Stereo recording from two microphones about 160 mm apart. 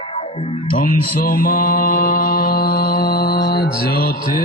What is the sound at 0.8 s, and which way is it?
Mantra, 65° left (ahead or behind).